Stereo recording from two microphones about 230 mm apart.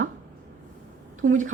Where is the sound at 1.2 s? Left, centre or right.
Right.